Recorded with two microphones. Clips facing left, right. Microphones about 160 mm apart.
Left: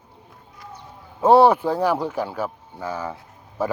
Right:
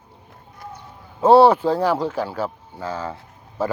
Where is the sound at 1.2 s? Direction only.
15° left (ahead or behind).